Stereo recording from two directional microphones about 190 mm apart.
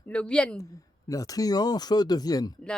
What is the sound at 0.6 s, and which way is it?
Speech, 15° left (ahead or behind).